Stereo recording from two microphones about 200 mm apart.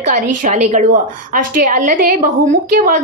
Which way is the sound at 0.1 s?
40° right (ahead or behind).